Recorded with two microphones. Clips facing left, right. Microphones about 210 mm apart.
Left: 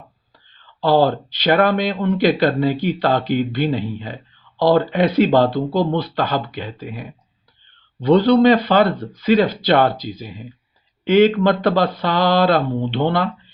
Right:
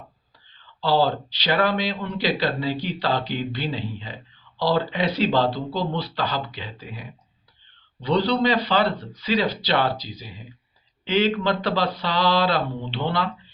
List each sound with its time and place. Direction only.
0.8 s speech: 50° left (ahead or behind)
8.0 s speech: 50° left (ahead or behind)